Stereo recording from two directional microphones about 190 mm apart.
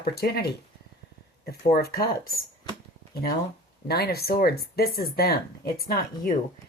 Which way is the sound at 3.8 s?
55° left (ahead or behind).